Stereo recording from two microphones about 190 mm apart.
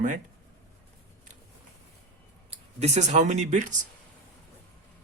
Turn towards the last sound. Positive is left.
turn(degrees=-40)  # may be behind; listen again after turning